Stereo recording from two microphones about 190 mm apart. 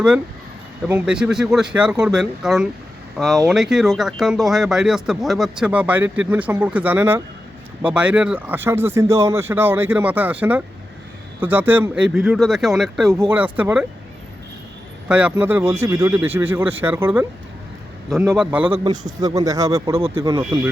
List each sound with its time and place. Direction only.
0.9 s speech: 5° right (ahead or behind)
15.0 s speech: 5° right (ahead or behind)
18.3 s speech: 5° right (ahead or behind)
18.9 s speech: 20° right (ahead or behind)